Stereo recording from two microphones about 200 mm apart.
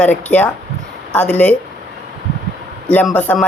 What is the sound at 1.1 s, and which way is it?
Speech, 5° left (ahead or behind).